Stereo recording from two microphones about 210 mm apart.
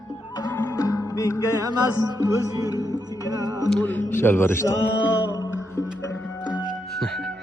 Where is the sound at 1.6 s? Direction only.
20° right (ahead or behind).